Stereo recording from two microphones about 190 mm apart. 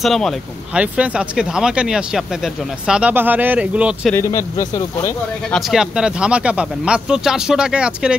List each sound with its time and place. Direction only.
0.0 s speech: centre (ahead or behind)
4.1 s speech: 15° left (ahead or behind)
5.5 s speech: centre (ahead or behind)